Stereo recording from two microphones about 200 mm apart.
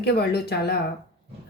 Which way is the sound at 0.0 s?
55° left (ahead or behind).